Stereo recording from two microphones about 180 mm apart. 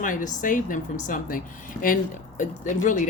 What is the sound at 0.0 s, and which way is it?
Speech, 50° left (ahead or behind).